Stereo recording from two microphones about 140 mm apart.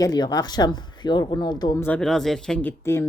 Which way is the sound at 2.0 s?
5° left (ahead or behind).